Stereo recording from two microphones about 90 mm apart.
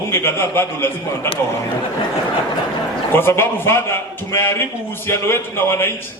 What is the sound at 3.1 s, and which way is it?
A man's voice, 25° left (ahead or behind).